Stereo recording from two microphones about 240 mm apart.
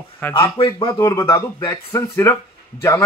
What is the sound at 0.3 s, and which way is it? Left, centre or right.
Speech, left.